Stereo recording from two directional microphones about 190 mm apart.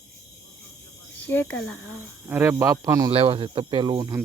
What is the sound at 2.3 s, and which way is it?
Speech, 10° right (ahead or behind).